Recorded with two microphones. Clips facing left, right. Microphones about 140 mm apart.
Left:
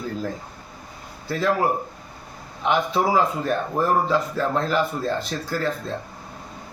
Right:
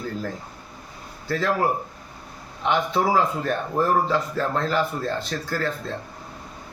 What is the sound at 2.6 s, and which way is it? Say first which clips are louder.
A man's voice: left 1 dB; 10° left (ahead or behind).